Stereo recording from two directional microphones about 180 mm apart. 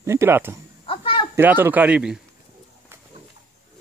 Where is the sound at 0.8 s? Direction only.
30° left (ahead or behind).